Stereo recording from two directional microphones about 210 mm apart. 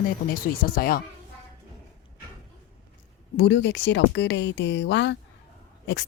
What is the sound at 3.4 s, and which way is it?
Speech, 55° left (ahead or behind).